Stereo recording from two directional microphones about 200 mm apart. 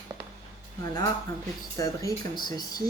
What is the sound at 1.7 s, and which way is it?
Speech, 15° left (ahead or behind).